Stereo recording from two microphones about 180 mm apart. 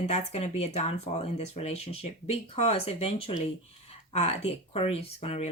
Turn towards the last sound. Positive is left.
turn(degrees=35)  # may be behind; listen again after turning